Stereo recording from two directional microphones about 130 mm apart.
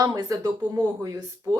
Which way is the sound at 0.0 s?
30° right (ahead or behind).